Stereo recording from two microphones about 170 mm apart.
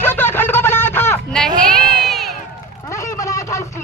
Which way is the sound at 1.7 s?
Centre (ahead or behind).